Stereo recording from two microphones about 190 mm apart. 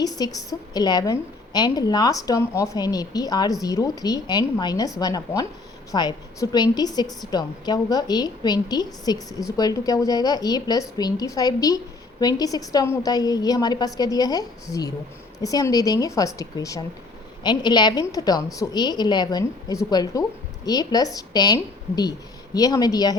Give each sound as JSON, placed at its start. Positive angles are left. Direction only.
{"t": 0.0, "sound": "a woman's voice", "side_deg": 20}